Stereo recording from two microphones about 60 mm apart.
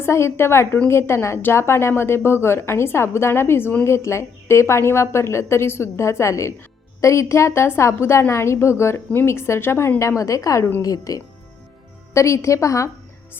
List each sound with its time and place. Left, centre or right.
0.0 s a woman's voice: left
10.0 s a woman's voice: left
10.8 s speech: left
12.1 s a woman's voice: left